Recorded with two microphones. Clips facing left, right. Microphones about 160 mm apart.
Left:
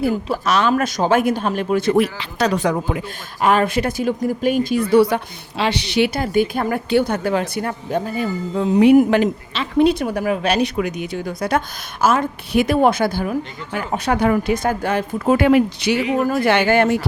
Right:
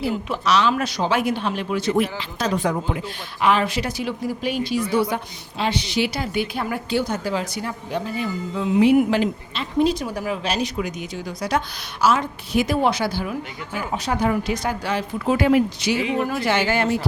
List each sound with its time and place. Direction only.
0.4 s speech: 50° left (ahead or behind); by 3.0 s 85° left
3.4 s speech: 50° left (ahead or behind)
9.0 s speech: 55° left (ahead or behind)